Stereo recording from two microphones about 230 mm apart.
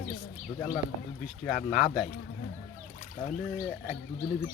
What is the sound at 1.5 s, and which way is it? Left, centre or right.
Speech, centre.